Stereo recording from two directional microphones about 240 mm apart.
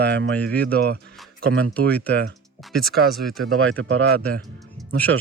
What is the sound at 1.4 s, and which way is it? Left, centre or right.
Speech, right.